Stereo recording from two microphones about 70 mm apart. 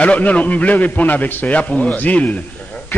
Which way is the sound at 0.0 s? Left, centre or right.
Centre.